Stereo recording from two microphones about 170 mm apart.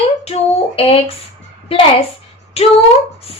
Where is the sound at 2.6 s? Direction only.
35° left (ahead or behind).